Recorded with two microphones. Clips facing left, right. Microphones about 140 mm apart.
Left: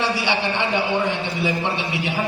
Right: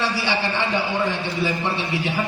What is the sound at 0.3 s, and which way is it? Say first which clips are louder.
Speech: left 1 dB; 20° left (ahead or behind).